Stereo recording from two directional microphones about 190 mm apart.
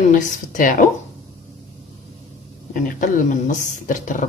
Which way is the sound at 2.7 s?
45° left (ahead or behind).